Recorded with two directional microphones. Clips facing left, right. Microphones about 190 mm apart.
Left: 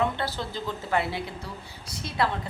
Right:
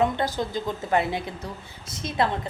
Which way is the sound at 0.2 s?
15° right (ahead or behind).